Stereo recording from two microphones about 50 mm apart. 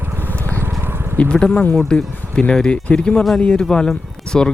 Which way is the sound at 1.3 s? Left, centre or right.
Centre.